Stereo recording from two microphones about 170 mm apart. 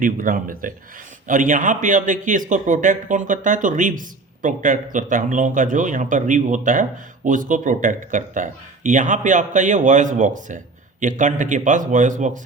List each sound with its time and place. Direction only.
0.0 s speech: 55° right (ahead or behind)